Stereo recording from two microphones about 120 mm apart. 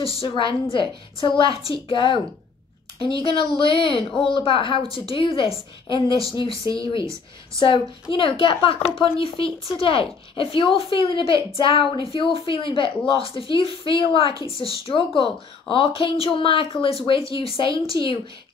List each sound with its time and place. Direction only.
0.2 s a woman's voice: 45° left (ahead or behind)